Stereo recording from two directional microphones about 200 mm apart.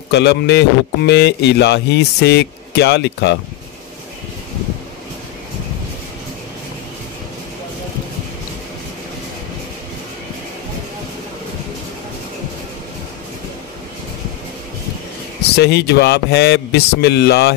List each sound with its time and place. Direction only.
0.1 s a man's voice: 60° left (ahead or behind)
15.5 s a man's voice: 55° left (ahead or behind)